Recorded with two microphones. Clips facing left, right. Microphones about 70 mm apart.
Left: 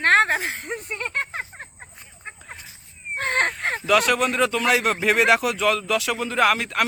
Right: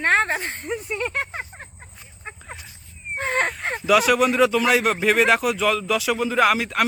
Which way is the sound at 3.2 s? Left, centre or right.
Centre.